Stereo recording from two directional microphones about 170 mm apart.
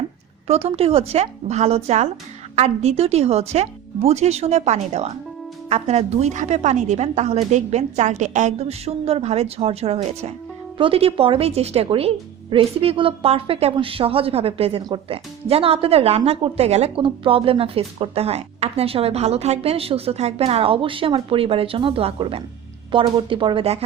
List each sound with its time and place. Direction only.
0.4 s speech: 35° right (ahead or behind)